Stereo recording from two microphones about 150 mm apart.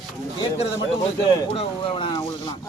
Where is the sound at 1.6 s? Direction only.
35° left (ahead or behind).